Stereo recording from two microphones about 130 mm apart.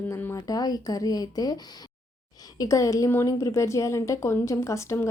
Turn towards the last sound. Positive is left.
turn(degrees=20)  # may be behind; listen again after turning